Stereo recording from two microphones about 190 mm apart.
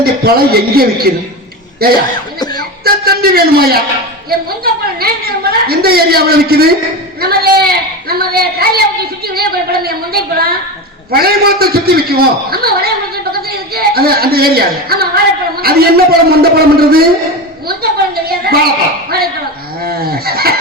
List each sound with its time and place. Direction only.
0.0 s a woman's voice: 55° right (ahead or behind)
2.1 s cough: 20° left (ahead or behind)
2.8 s a woman's voice: 55° right (ahead or behind)
19.8 s a woman's voice: 55° right (ahead or behind)